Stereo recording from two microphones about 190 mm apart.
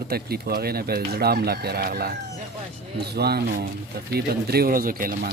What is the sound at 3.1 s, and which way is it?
Speech, 55° right (ahead or behind).